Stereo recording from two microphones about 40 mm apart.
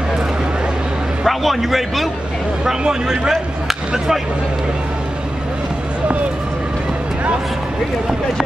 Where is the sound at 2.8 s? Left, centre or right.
Centre.